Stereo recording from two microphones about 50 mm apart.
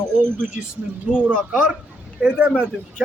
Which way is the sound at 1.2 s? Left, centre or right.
Right.